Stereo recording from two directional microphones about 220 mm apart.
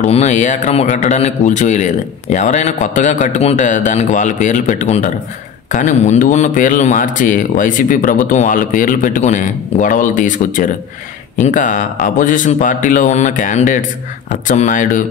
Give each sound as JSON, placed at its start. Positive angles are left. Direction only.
{"t": 0.0, "sound": "speech", "side_deg": 30}